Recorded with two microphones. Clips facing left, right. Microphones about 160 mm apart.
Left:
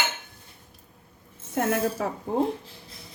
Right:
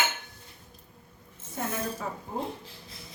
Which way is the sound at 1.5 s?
75° left (ahead or behind).